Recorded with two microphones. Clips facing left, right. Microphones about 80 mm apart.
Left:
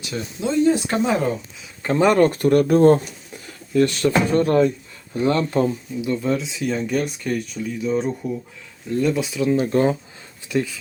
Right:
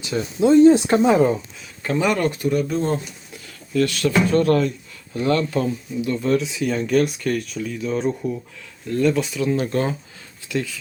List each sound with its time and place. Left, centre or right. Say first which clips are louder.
0.1 s speech: right 8 dB; right
1.0 s speech: right 4 dB; centre
1.8 s speech: left 4 dB; left
3.3 s a sound: left 2 dB; left
4.3 s speech: left 1 dB; centre
6.4 s speech: right 1 dB; centre
8.9 s speech: right 1 dB; centre